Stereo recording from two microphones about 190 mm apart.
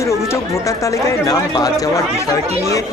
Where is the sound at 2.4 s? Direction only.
35° right (ahead or behind).